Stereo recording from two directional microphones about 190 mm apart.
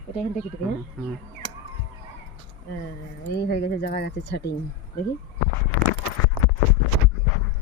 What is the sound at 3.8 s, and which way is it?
Speech, 55° left (ahead or behind).